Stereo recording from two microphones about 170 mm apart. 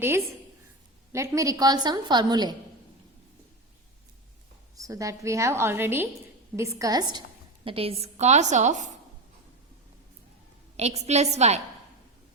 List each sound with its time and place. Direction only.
1.1 s a woman's voice: 15° right (ahead or behind)
4.8 s a woman's voice: 20° right (ahead or behind)
7.6 s a woman's voice: 35° right (ahead or behind)
10.8 s a woman's voice: 40° right (ahead or behind)